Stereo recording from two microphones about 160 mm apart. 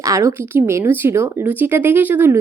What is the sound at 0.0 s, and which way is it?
Speech, 20° right (ahead or behind).